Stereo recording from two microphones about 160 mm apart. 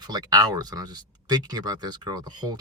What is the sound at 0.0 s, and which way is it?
Speech, 25° right (ahead or behind).